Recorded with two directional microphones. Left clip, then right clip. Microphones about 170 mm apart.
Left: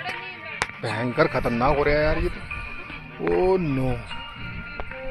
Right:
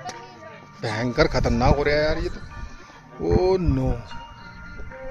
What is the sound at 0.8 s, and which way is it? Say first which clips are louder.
Speech: right 2 dB; 35° right (ahead or behind).